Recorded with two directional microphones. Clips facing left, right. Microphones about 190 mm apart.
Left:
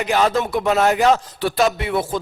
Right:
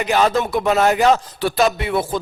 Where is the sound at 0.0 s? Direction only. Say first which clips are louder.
Right 1 dB; 15° right (ahead or behind).